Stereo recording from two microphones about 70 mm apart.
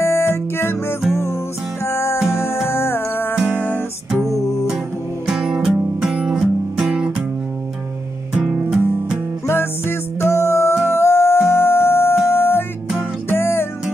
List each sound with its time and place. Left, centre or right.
0.0 s guitar: left
1.9 s music: left
3.3 s music: centre
5.2 s music: centre
8.4 s music: centre
9.5 s music: left